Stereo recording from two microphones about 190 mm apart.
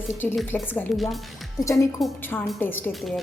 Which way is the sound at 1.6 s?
15° left (ahead or behind).